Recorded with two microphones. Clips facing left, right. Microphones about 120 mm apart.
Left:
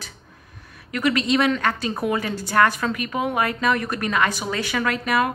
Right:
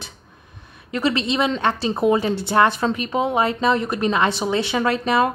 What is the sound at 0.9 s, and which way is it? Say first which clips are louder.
A woman's voice: even; 25° right (ahead or behind).